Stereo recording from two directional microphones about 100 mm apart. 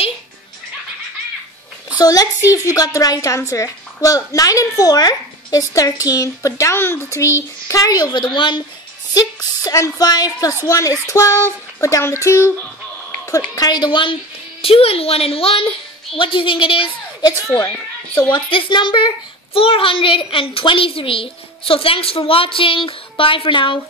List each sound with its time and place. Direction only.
2.0 s a woman's voice: 35° left (ahead or behind); by 8.6 s 55° left (ahead or behind)
9.1 s a woman's voice: 40° left (ahead or behind)
13.6 s a woman's voice: 45° left (ahead or behind)
14.6 s a woman's voice: 75° left (ahead or behind)
16.2 s a child's voice: 55° left (ahead or behind)
18.3 s a child's voice: 50° left (ahead or behind)